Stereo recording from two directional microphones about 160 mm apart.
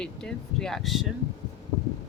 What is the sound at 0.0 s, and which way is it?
Speech, 5° left (ahead or behind).